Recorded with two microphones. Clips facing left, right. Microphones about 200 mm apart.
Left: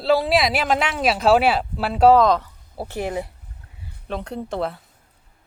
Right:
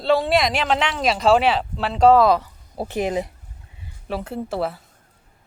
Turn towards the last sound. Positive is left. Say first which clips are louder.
# right 1 dB
turn(degrees=-5)  # may be behind; listen again after turning